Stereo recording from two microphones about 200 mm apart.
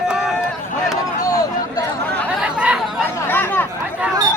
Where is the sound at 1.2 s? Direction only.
20° left (ahead or behind).